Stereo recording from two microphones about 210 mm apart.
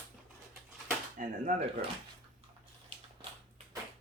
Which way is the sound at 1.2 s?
40° right (ahead or behind).